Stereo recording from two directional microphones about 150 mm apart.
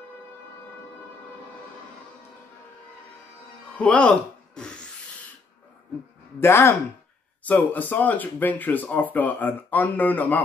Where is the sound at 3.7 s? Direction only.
10° left (ahead or behind).